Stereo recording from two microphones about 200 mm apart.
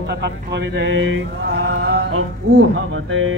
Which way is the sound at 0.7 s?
65° right (ahead or behind).